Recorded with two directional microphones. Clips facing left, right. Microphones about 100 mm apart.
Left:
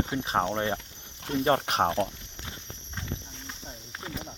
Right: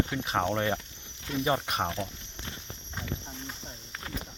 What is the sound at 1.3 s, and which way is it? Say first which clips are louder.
Speech: left 4 dB; 55° left (ahead or behind).